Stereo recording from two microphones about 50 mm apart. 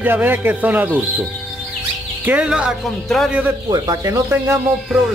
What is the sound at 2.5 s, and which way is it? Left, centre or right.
Speech, centre.